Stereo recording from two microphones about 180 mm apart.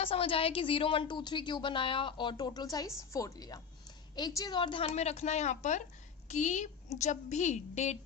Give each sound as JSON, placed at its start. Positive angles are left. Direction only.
{"t": 0.0, "sound": "a woman's voice", "side_deg": 30}